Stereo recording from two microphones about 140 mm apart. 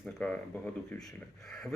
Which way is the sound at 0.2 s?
10° left (ahead or behind).